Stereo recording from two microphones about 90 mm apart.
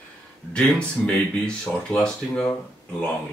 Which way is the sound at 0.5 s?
15° left (ahead or behind).